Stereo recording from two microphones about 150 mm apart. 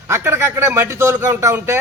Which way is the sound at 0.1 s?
15° right (ahead or behind).